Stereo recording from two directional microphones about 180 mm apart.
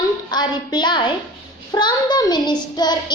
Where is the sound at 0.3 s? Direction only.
25° left (ahead or behind).